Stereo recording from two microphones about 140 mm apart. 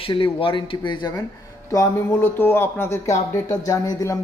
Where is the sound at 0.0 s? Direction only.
40° left (ahead or behind).